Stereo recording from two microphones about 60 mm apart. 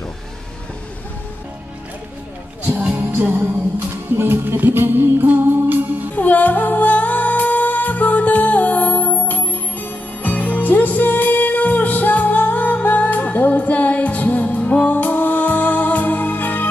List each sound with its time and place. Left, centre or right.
2.6 s music: centre
3.1 s music: right
6.1 s music: left